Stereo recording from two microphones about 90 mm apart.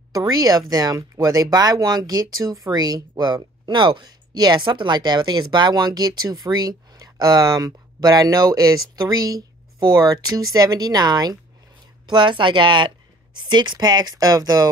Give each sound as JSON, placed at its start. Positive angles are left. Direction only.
{"t": 0.1, "sound": "speech", "side_deg": -45}
{"t": 12.1, "sound": "a woman's voice", "side_deg": -60}